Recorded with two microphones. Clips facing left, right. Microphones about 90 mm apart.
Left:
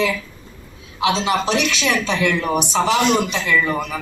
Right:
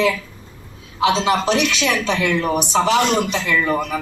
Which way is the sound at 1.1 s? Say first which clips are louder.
Right 1 dB; 40° right (ahead or behind).